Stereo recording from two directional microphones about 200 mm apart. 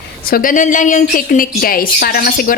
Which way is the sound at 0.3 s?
45° left (ahead or behind).